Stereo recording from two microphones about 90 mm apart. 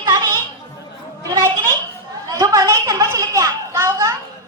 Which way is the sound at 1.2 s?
35° right (ahead or behind).